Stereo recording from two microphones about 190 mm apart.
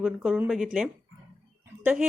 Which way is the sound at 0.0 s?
5° right (ahead or behind).